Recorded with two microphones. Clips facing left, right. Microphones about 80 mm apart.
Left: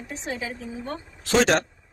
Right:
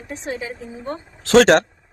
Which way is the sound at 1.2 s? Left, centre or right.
Right.